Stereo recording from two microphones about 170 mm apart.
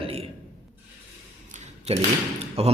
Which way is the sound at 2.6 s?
35° right (ahead or behind).